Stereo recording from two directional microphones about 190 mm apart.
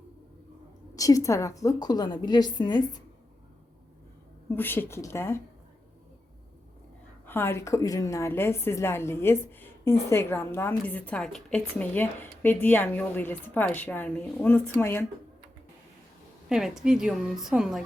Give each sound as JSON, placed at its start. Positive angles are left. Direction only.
{"t": 0.9, "sound": "a woman's voice", "side_deg": 20}
{"t": 4.4, "sound": "a woman's voice", "side_deg": 10}
{"t": 7.3, "sound": "a woman's voice", "side_deg": 10}
{"t": 16.5, "sound": "a woman's voice", "side_deg": 0}